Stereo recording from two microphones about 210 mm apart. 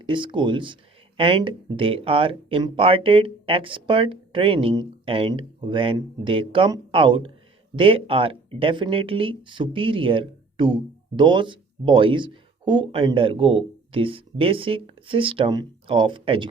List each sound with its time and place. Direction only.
0.0 s speech: 25° right (ahead or behind)